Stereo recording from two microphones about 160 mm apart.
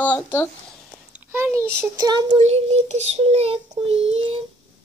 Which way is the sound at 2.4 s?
40° right (ahead or behind).